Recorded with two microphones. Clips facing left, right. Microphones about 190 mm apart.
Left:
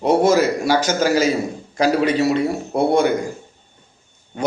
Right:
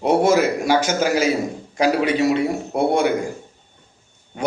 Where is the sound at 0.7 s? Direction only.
35° left (ahead or behind).